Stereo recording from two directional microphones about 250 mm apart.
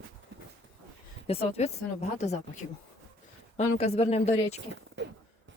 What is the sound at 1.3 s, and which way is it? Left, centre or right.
Speech, left.